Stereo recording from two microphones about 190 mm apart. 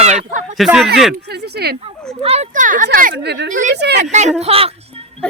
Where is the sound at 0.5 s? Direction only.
Centre (ahead or behind).